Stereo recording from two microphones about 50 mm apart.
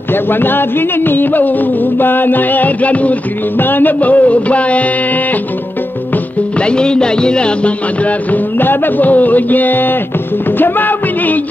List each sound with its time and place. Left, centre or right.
0.1 s music: left
3.5 s music: left
6.6 s music: centre
8.5 s music: left